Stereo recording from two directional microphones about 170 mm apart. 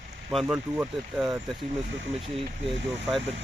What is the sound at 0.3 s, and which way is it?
Speech, 10° right (ahead or behind).